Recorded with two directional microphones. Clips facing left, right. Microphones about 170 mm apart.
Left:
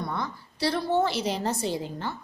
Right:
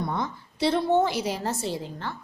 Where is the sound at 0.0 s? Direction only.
20° right (ahead or behind).